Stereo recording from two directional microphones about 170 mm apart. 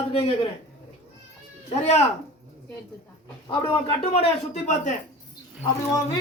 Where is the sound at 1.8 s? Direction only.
40° left (ahead or behind).